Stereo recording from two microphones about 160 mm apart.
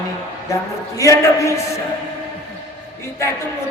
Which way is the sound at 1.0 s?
20° left (ahead or behind).